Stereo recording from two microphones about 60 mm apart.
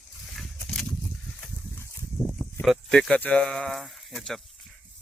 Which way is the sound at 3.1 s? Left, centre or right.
Centre.